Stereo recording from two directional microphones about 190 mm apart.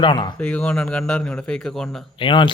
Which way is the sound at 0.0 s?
25° left (ahead or behind).